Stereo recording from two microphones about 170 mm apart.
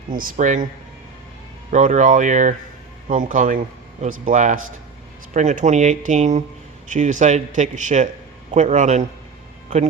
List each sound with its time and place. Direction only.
0.1 s speech: 55° right (ahead or behind)
1.7 s speech: 45° right (ahead or behind)